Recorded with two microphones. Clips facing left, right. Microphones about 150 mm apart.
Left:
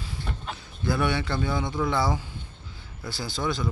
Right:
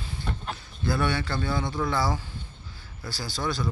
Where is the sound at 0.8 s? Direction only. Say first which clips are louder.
Left 1 dB; 20° left (ahead or behind).